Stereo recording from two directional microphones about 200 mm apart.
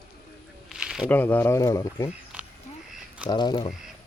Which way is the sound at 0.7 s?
5° right (ahead or behind).